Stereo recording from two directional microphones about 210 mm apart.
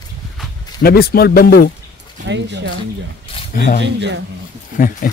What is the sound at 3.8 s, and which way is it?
Speech, 55° right (ahead or behind).